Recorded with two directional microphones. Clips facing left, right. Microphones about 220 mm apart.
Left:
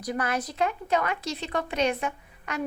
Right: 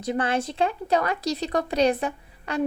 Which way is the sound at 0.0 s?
25° right (ahead or behind).